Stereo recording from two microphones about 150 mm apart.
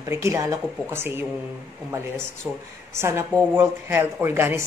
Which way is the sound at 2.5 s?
10° right (ahead or behind).